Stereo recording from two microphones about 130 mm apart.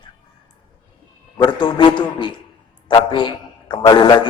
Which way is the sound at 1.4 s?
35° left (ahead or behind).